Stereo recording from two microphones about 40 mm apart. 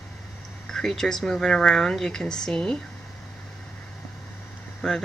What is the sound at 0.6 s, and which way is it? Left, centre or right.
Speech, centre.